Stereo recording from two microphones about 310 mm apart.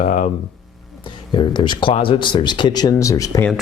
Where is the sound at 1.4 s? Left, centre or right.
Centre.